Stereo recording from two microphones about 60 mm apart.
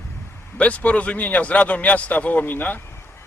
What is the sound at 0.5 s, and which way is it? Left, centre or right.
Speech, left.